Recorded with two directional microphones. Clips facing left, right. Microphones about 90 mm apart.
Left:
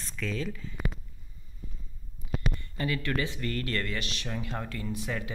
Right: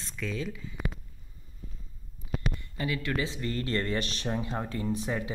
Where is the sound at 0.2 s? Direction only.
10° right (ahead or behind).